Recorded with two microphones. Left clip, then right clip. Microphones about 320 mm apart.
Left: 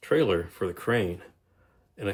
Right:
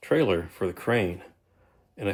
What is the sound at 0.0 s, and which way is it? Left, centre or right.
Speech, centre.